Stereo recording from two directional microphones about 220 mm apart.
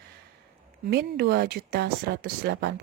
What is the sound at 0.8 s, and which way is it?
Speech, 50° right (ahead or behind).